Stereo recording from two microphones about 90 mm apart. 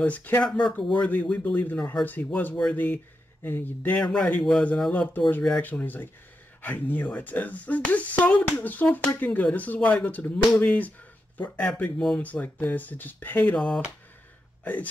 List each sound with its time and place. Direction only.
0.0 s speech: 20° left (ahead or behind)